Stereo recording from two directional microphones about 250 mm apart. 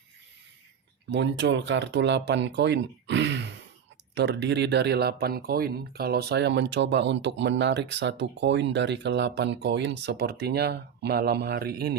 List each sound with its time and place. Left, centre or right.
1.1 s speech: right